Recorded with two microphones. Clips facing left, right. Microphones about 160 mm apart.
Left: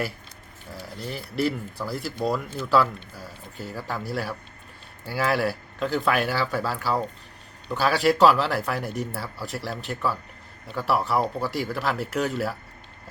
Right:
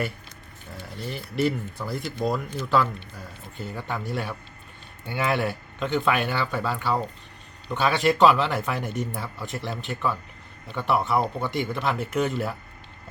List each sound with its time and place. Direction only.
0.9 s a man's voice: centre (ahead or behind)